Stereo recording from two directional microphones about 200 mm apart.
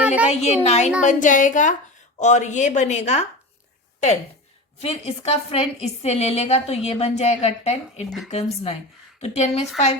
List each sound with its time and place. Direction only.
0.3 s a woman's voice: 35° left (ahead or behind)
4.8 s a woman's voice: 30° left (ahead or behind)